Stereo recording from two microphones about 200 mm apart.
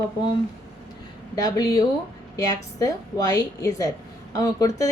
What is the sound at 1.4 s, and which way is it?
A woman's voice, 20° left (ahead or behind).